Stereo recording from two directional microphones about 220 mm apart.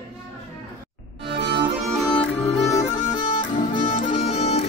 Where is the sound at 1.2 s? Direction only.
50° right (ahead or behind).